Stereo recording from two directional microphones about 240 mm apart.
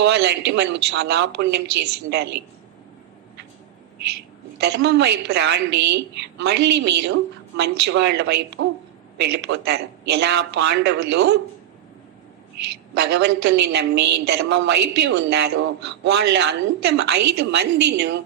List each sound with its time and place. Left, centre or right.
0.0 s a woman's voice: right
4.6 s a woman's voice: right
12.9 s a woman's voice: right